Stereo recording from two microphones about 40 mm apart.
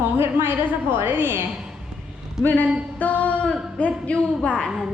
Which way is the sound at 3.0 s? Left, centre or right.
Left.